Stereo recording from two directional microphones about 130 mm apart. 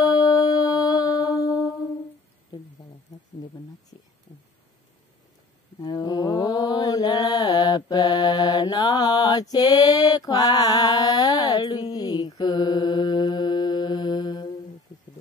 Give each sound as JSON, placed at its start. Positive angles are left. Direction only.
{"t": 0.0, "sound": "music", "side_deg": 30}
{"t": 5.8, "sound": "mantra", "side_deg": 30}